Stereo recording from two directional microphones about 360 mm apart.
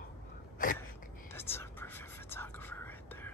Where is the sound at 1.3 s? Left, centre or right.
Centre.